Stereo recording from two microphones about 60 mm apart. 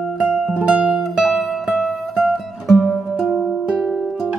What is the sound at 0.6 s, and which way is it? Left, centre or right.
Music, centre.